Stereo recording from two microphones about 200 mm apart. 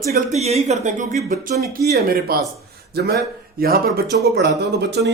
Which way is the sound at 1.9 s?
50° right (ahead or behind).